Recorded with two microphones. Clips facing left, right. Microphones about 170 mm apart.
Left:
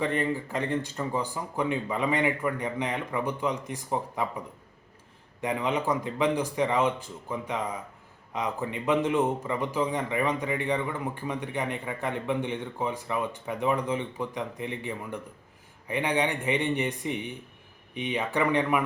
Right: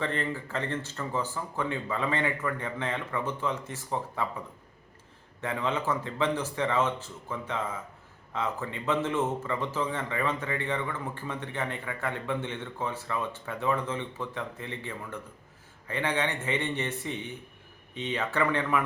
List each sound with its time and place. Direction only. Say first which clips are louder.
0.0 s a man's voice: left 4 dB; 15° left (ahead or behind)